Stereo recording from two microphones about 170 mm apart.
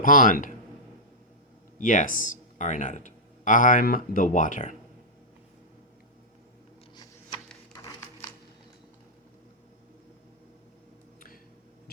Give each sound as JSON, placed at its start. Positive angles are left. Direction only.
{"t": 0.0, "sound": "speech", "side_deg": 55}
{"t": 1.8, "sound": "speech", "side_deg": 50}